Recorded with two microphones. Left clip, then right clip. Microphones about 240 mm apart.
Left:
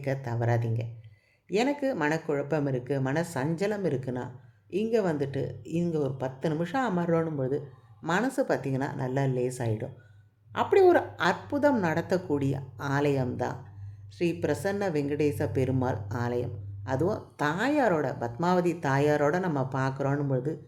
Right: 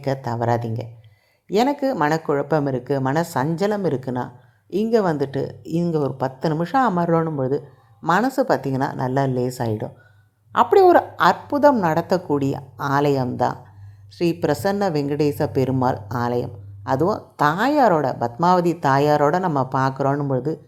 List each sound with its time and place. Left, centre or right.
0.0 s a woman's voice: centre